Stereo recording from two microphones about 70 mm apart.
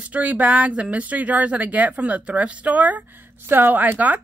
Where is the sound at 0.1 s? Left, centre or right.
Right.